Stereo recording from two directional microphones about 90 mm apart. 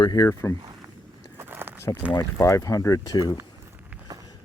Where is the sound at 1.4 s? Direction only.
25° right (ahead or behind).